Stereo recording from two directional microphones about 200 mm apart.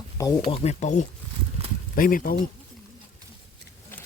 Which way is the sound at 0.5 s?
35° left (ahead or behind).